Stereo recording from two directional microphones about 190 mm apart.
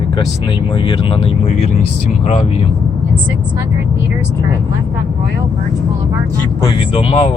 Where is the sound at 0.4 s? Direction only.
25° left (ahead or behind).